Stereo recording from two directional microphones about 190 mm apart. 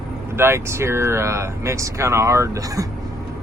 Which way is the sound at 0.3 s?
15° right (ahead or behind).